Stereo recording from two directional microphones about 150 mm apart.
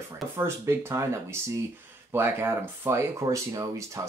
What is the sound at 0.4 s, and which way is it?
Speech, 20° right (ahead or behind).